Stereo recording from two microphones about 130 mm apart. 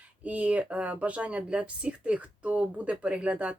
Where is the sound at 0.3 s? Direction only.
10° right (ahead or behind).